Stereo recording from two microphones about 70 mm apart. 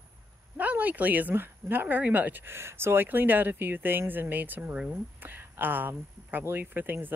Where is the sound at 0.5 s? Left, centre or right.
Right.